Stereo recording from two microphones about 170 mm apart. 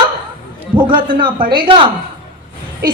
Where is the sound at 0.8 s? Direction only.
30° right (ahead or behind).